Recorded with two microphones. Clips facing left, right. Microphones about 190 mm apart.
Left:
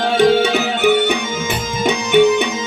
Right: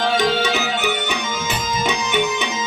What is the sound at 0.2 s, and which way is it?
Music, 55° left (ahead or behind).